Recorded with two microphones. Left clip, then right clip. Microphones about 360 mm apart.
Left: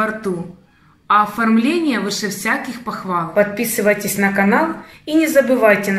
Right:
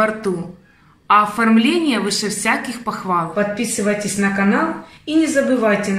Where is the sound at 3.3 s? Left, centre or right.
Centre.